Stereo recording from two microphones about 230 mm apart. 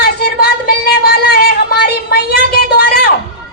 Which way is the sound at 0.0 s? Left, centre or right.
Left.